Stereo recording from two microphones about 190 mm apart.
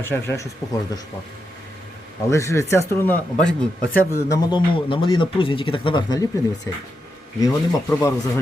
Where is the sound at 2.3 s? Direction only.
15° left (ahead or behind).